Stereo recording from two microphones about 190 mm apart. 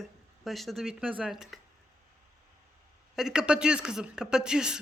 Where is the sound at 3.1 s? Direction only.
5° right (ahead or behind).